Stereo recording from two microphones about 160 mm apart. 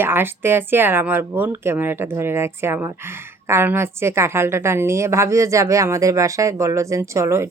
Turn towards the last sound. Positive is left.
turn(degrees=-15)  # may be behind; listen again after turning